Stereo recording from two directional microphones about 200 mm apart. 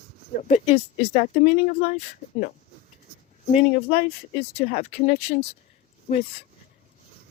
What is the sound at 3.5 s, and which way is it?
Speech, 30° left (ahead or behind).